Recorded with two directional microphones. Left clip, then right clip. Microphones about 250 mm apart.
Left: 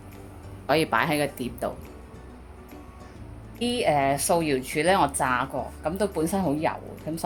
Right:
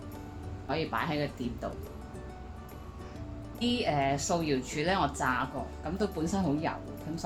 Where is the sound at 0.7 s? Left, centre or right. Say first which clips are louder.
Left 10 dB; left.